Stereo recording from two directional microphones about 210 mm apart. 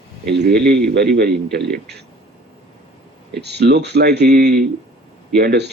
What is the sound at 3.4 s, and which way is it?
Speech, 50° right (ahead or behind).